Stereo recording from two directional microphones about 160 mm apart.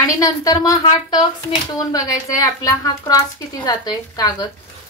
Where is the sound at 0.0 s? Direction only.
20° left (ahead or behind).